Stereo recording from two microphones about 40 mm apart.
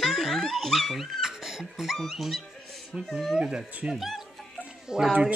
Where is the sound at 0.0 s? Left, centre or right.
Centre.